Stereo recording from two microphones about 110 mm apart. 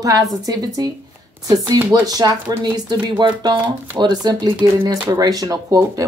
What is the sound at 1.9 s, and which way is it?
Speech, 35° right (ahead or behind).